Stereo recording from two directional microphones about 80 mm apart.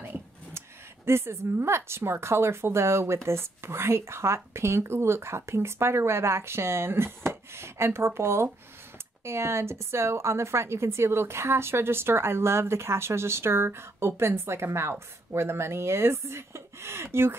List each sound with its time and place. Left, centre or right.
0.0 s a woman's voice: right